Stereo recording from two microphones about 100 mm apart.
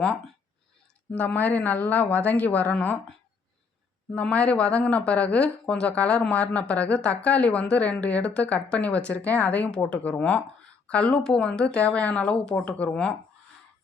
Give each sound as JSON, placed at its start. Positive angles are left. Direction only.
{"t": 1.1, "sound": "speech", "side_deg": 15}
{"t": 4.1, "sound": "speech", "side_deg": 10}